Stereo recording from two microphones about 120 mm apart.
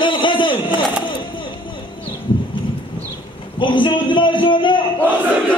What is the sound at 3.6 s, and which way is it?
A man's voice, 45° left (ahead or behind).